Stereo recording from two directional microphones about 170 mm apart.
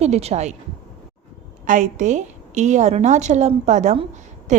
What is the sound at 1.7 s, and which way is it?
A woman's voice, 45° right (ahead or behind).